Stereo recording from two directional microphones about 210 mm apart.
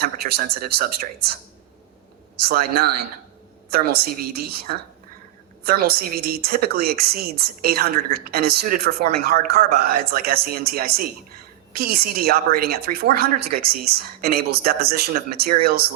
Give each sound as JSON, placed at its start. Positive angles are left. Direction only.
{"t": 0.0, "sound": "speech", "side_deg": -45}
{"t": 2.5, "sound": "speech", "side_deg": -45}